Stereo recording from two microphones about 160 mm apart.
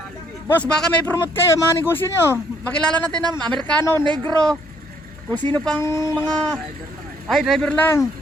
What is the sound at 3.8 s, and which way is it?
Speech, 15° left (ahead or behind).